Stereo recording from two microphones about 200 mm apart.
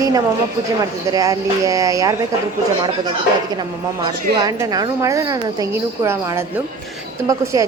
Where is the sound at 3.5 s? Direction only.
20° right (ahead or behind).